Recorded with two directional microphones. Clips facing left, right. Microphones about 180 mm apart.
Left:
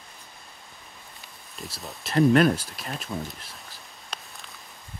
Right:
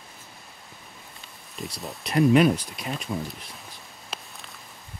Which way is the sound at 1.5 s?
Centre (ahead or behind).